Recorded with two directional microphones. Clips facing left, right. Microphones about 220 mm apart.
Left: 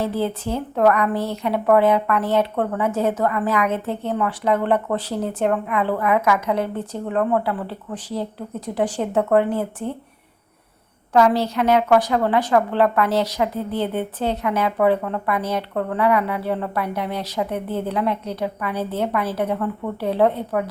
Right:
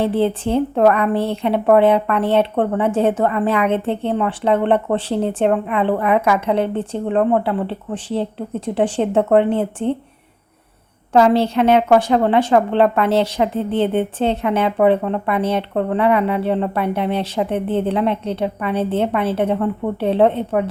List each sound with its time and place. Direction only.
0.0 s speech: 30° right (ahead or behind)
11.1 s speech: 25° right (ahead or behind)